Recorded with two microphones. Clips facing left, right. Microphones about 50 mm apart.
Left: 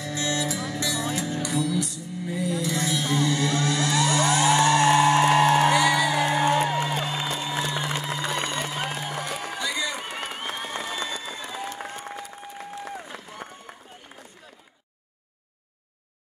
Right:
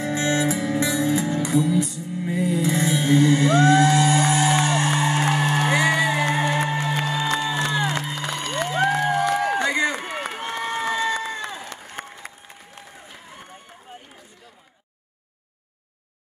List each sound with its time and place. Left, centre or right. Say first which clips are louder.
0.0 s music: right 6 dB; right
5.2 s music: left 3 dB; left
5.7 s music: right 1 dB; right
6.9 s music: right 4 dB; right
7.5 s music: right 4 dB; right
10.5 s crowd: right 6 dB; right
12.0 s applause: right 2 dB; right
12.8 s applause: left 6 dB; left